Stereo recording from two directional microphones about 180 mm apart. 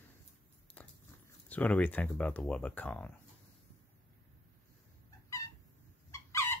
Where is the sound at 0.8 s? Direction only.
10° left (ahead or behind).